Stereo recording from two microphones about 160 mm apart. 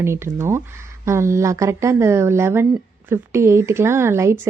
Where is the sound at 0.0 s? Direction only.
15° right (ahead or behind).